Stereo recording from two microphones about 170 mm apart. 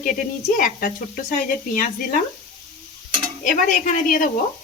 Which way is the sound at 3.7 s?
50° left (ahead or behind).